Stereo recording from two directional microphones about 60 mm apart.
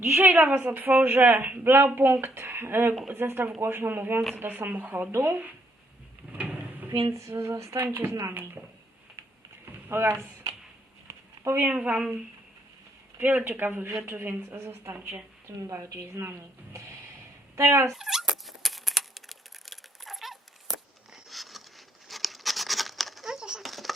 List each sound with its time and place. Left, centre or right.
0.1 s speech: right
5.1 s a woman's voice: right
6.3 s a sound: right
7.1 s a sound: right
8.3 s speech: right
9.6 s a sound: right
11.6 s speech: right
13.1 s a woman's voice: right
17.5 s dog: right
17.9 s speech: centre
18.3 s a sound: centre
23.6 s baby laughter: centre